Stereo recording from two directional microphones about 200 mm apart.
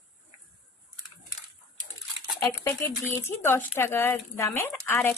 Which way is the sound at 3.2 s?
10° left (ahead or behind).